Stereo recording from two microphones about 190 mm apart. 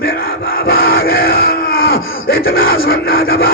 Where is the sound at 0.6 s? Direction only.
50° left (ahead or behind).